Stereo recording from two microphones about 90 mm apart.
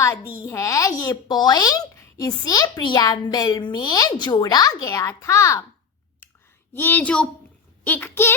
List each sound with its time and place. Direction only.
0.0 s a child's voice: 35° left (ahead or behind)
6.7 s a woman's voice: 20° left (ahead or behind)